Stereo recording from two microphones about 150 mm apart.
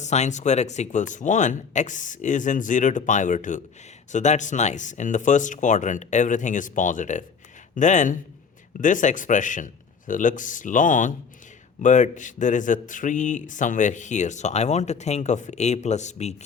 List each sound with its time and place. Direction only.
0.0 s speech: 50° left (ahead or behind)